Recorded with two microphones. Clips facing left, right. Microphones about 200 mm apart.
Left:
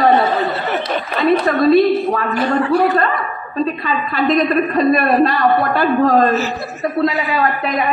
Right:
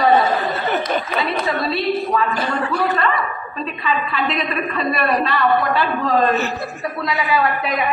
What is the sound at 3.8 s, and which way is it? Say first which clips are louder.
A woman's voice: left 4 dB; 45° left (ahead or behind).